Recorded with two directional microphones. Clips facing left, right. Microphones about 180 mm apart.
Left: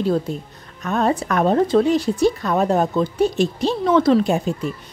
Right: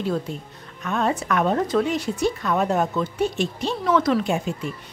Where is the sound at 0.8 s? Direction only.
40° left (ahead or behind).